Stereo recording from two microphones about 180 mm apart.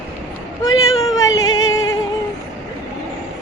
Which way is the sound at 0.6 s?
20° left (ahead or behind).